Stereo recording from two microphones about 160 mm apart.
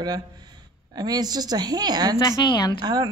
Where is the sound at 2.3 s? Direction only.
25° left (ahead or behind).